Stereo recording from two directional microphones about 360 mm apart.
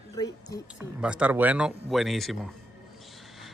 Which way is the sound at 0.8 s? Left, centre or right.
Centre.